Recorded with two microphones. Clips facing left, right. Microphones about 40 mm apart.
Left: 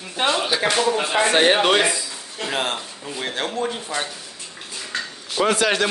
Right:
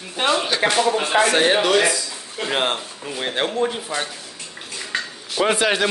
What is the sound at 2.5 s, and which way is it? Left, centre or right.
Speech, right.